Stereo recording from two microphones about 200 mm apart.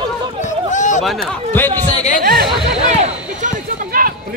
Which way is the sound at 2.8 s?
35° right (ahead or behind).